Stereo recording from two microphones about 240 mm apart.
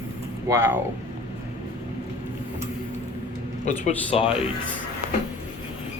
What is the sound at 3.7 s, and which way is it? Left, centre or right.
Speech, left.